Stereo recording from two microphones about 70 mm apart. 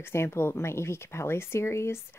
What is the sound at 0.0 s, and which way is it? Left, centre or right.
Speech, left.